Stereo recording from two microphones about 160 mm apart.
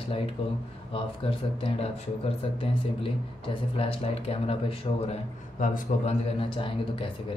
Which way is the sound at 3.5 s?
35° left (ahead or behind).